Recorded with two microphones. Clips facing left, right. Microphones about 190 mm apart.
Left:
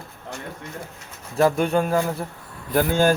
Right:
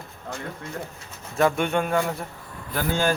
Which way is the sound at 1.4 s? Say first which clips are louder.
Left 3 dB; 35° left (ahead or behind).